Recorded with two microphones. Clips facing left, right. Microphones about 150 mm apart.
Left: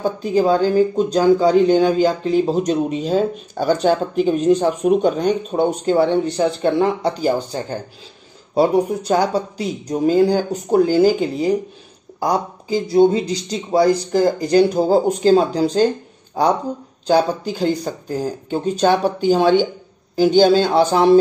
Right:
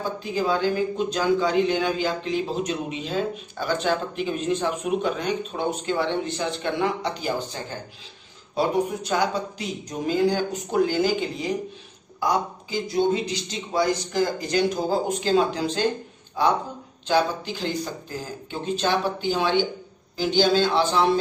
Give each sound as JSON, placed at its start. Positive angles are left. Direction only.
{"t": 0.2, "sound": "speech", "side_deg": 40}
{"t": 17.1, "sound": "speech", "side_deg": 40}